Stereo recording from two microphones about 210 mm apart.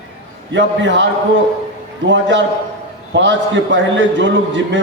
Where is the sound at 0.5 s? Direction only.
60° right (ahead or behind).